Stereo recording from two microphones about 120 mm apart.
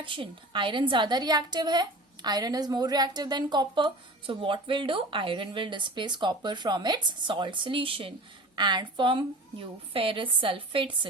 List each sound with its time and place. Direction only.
0.0 s a woman's voice: 45° right (ahead or behind)